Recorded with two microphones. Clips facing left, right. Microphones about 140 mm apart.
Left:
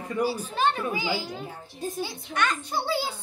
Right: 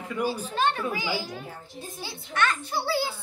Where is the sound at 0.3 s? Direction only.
10° left (ahead or behind).